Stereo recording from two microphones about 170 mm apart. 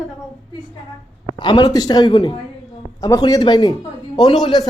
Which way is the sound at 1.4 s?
25° left (ahead or behind).